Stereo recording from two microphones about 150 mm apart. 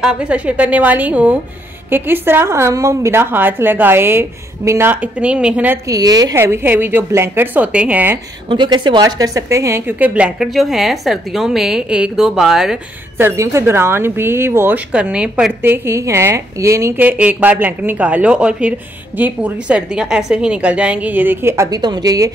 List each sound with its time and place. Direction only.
0.0 s a woman's voice: 10° right (ahead or behind)
5.9 s a woman's voice: 25° right (ahead or behind)
6.4 s a woman's voice: 15° right (ahead or behind)
8.5 s a woman's voice: 30° right (ahead or behind); by 12.7 s 5° right (ahead or behind)
13.2 s a woman's voice: 20° right (ahead or behind)
15.6 s a woman's voice: 15° right (ahead or behind)